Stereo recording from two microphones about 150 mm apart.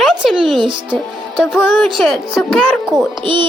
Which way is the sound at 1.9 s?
Centre (ahead or behind).